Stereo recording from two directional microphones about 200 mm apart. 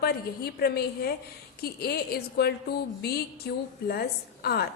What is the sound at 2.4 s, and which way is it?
Speech, 50° left (ahead or behind).